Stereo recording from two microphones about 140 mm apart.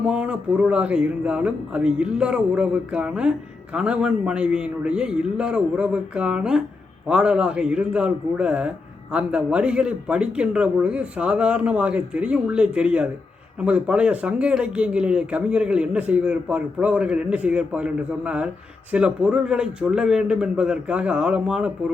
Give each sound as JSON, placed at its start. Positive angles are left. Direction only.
{"t": 0.0, "sound": "speech", "side_deg": -10}